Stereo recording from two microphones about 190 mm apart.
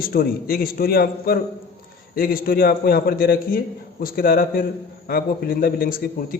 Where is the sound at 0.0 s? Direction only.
55° left (ahead or behind).